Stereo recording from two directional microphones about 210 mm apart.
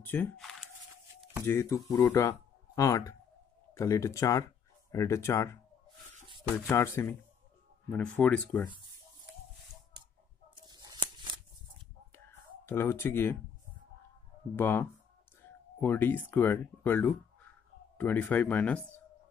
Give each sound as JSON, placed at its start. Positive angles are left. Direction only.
{"t": 0.0, "sound": "speech", "side_deg": 10}
{"t": 1.4, "sound": "speech", "side_deg": 15}
{"t": 10.7, "sound": "scissors", "side_deg": -20}
{"t": 12.1, "sound": "a sound", "side_deg": 10}
{"t": 14.5, "sound": "speech", "side_deg": 10}